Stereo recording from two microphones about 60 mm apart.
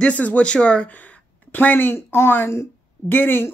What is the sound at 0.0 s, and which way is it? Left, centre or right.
Speech, left.